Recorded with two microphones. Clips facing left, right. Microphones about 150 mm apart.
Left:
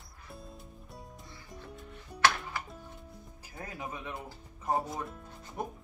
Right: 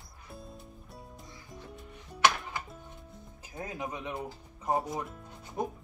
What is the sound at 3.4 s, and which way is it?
Music, 20° right (ahead or behind).